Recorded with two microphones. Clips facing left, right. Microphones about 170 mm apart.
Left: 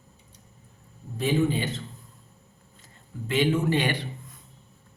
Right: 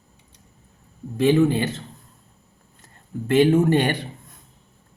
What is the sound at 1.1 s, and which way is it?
Speech, 70° right (ahead or behind).